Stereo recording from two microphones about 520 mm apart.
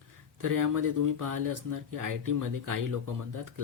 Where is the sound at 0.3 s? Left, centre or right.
Right.